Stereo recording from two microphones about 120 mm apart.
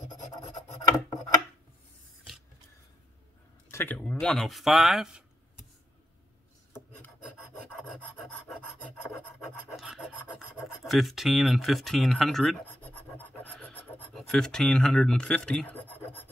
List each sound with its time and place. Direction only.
0.1 s scratch: 35° left (ahead or behind)
3.7 s speech: 15° left (ahead or behind); by 5.2 s 5° right (ahead or behind)
6.7 s filing: 15° left (ahead or behind)
7.9 s filing: 5° left (ahead or behind)
9.4 s filing: centre (ahead or behind)
10.6 s speech: centre (ahead or behind)
12.8 s filing: 15° left (ahead or behind)
14.1 s speech: 5° left (ahead or behind)